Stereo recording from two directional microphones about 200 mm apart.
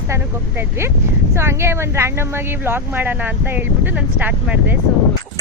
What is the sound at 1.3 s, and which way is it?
Speech, 10° right (ahead or behind).